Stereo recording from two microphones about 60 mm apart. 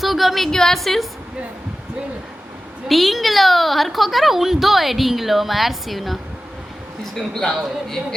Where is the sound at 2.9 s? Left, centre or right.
Centre.